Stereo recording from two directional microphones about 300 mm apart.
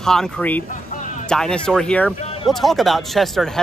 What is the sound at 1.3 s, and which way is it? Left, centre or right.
Speech, centre.